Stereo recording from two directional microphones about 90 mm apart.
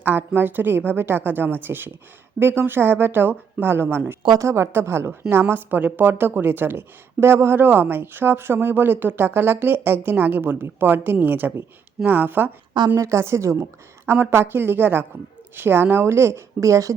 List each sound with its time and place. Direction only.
0.0 s a woman's voice: 20° right (ahead or behind)
13.0 s a woman's voice: 30° right (ahead or behind)